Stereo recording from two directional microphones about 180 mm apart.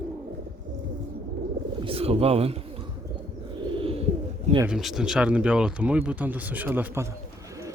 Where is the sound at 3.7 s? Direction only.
30° right (ahead or behind).